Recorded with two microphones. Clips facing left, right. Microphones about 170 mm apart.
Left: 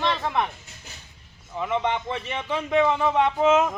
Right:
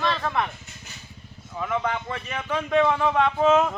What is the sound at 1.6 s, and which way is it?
Speech, 20° left (ahead or behind).